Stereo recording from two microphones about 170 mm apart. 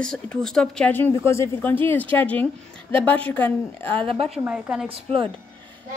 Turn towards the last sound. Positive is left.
turn(degrees=-35)  # may be behind; listen again after turning